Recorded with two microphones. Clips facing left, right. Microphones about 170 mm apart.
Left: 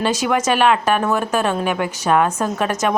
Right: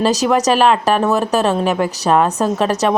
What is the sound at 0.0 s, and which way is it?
A woman's voice, 40° right (ahead or behind).